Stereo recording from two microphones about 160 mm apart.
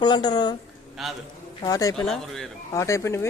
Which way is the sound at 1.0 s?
Centre (ahead or behind).